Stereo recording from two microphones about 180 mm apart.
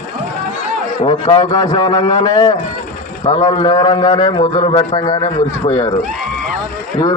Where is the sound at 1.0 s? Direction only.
25° left (ahead or behind).